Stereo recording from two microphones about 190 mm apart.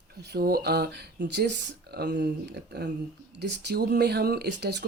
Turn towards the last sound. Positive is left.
turn(degrees=-60)  # may be behind; listen again after turning